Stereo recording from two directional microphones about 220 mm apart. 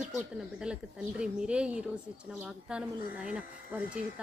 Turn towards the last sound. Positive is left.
turn(degrees=-5)  # may be behind; listen again after turning